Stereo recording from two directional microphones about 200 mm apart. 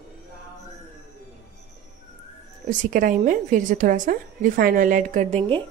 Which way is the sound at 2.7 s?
40° right (ahead or behind).